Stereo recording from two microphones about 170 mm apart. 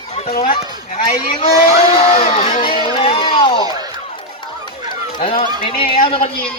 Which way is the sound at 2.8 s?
35° left (ahead or behind).